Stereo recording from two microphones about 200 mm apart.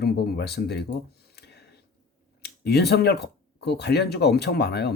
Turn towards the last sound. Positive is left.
turn(degrees=55)  # may be behind; listen again after turning